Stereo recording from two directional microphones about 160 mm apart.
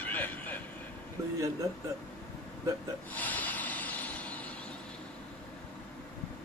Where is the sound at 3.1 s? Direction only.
10° left (ahead or behind).